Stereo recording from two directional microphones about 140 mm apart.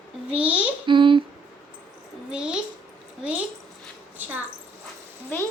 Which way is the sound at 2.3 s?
5° right (ahead or behind).